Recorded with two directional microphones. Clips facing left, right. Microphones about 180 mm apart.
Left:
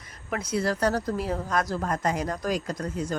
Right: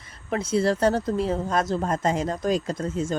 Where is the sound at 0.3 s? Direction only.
25° right (ahead or behind).